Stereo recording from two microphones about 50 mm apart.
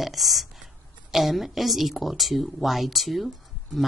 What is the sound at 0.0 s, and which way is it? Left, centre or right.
Speech, centre.